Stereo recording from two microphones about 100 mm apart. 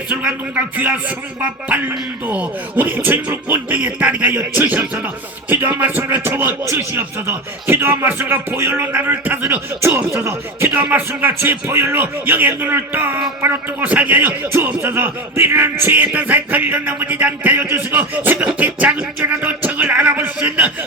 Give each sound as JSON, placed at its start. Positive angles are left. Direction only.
{"t": 0.1, "sound": "a man's voice", "side_deg": -10}